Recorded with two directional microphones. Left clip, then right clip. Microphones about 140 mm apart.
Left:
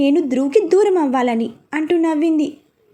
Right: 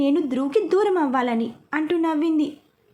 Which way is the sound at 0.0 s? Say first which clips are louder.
Left 5 dB; 20° left (ahead or behind).